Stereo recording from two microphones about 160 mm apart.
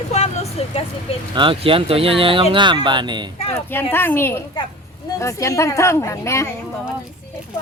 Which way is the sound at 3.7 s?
15° left (ahead or behind).